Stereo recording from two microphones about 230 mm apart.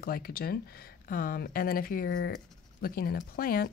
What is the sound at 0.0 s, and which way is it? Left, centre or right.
A woman's voice, left.